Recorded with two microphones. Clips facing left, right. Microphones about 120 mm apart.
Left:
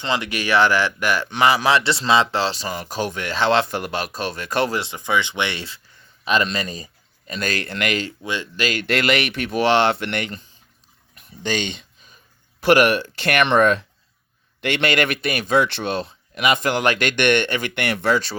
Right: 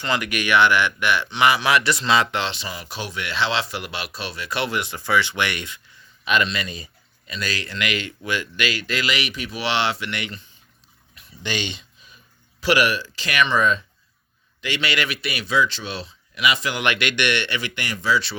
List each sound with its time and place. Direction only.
0.0 s speech: 25° left (ahead or behind); by 4.8 s 45° left (ahead or behind)
4.8 s speech: 20° left (ahead or behind); by 6.8 s 40° left (ahead or behind)
7.3 s a man's voice: 50° left (ahead or behind)
8.2 s speech: 25° left (ahead or behind)
8.6 s a man's voice: 50° left (ahead or behind)
11.1 s a sound: 50° left (ahead or behind)
14.6 s a man's voice: 55° left (ahead or behind)